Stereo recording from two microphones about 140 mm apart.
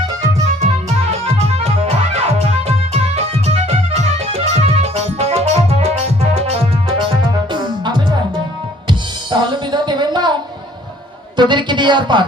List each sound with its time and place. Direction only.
1.2 s music: 45° right (ahead or behind)
3.4 s music: 50° right (ahead or behind)
7.5 s music: 30° right (ahead or behind)
11.3 s speech: 35° right (ahead or behind)